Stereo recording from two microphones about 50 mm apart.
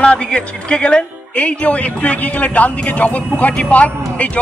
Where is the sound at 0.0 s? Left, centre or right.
Left.